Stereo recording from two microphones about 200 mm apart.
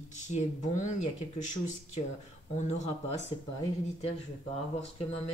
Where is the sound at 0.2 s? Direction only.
35° left (ahead or behind).